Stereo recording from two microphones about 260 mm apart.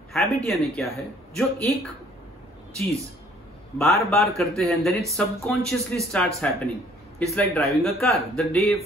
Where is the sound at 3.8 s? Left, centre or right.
Centre.